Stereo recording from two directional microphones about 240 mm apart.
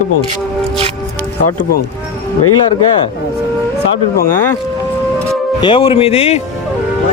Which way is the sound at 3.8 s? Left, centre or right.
Left.